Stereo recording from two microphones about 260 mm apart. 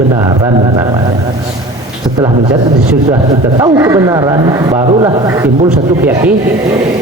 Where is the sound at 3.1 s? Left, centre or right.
Centre.